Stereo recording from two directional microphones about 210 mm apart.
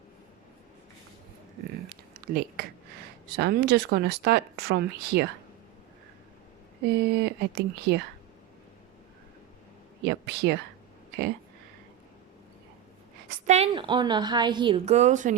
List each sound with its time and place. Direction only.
1.9 s a sound: 45° right (ahead or behind)
3.3 s speech: 50° right (ahead or behind)
6.8 s speech: 50° right (ahead or behind)
10.0 s speech: 50° right (ahead or behind)
13.5 s a woman's voice: 25° right (ahead or behind)